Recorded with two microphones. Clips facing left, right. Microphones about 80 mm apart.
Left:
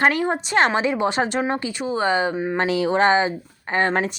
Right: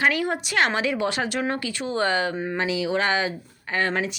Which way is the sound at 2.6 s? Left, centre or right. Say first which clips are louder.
Left 5 dB; left.